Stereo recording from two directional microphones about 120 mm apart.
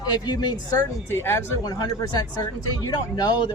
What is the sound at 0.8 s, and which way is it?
Speech, 20° left (ahead or behind).